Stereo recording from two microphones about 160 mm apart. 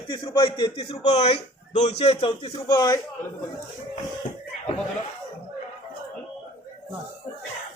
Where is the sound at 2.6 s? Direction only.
20° left (ahead or behind).